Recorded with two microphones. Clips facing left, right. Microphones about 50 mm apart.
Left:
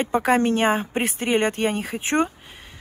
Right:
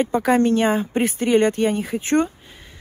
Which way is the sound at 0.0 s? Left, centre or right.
Left.